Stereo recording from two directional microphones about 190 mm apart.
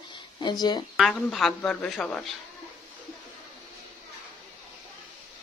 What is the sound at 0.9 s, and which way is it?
Speech, centre (ahead or behind).